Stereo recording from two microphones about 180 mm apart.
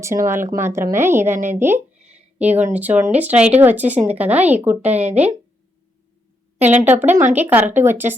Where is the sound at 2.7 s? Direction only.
10° right (ahead or behind).